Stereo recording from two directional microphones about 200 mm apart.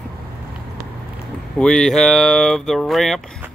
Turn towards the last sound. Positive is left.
turn(degrees=0)  # may be behind; listen again after turning